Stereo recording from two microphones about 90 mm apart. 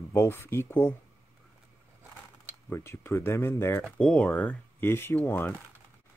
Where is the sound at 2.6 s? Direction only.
25° left (ahead or behind).